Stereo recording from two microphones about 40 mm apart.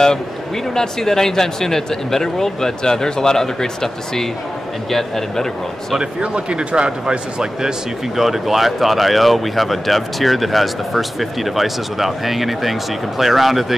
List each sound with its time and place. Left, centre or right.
0.7 s speech: centre
5.9 s speech: right
8.2 s speech: centre